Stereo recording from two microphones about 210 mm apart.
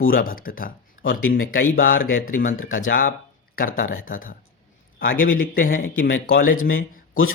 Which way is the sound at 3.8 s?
40° left (ahead or behind).